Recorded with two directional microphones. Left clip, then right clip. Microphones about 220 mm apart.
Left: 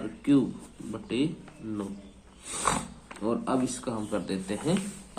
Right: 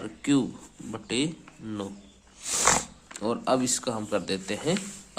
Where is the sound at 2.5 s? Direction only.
50° right (ahead or behind).